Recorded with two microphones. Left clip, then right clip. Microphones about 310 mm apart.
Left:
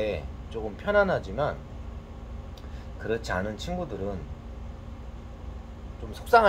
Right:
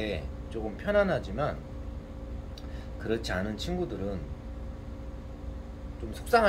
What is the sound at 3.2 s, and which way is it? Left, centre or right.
Speech, centre.